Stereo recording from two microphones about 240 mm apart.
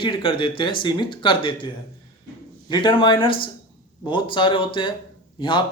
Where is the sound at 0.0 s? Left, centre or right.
Left.